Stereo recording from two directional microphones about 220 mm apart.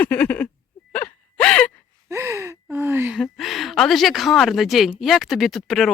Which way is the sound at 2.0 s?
10° right (ahead or behind).